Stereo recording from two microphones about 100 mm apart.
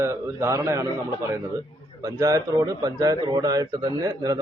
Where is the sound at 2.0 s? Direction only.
35° right (ahead or behind).